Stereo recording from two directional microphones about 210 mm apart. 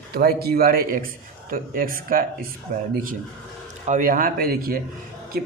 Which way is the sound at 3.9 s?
40° right (ahead or behind).